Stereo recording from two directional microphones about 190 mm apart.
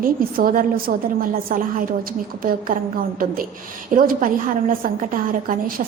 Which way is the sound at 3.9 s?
45° right (ahead or behind).